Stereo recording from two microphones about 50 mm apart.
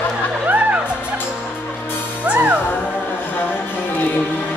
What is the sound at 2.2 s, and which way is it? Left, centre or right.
Music, right.